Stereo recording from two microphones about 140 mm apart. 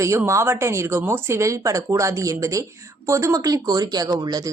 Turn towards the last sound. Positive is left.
turn(degrees=-30)  # may be behind; listen again after turning